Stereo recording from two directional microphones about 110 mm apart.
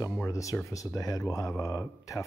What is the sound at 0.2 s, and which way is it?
Music, 30° left (ahead or behind).